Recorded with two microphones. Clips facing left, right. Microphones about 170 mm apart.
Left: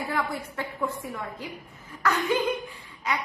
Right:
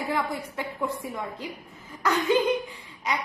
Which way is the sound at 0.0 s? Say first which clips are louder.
Right 1 dB; 20° right (ahead or behind).